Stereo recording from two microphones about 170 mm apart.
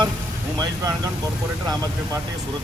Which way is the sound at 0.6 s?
20° right (ahead or behind).